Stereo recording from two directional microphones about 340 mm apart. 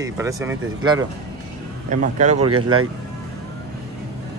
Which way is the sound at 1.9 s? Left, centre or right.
Right.